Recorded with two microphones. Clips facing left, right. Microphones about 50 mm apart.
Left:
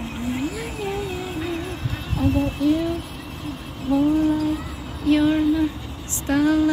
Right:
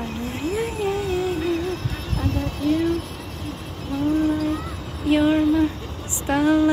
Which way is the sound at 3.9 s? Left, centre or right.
Centre.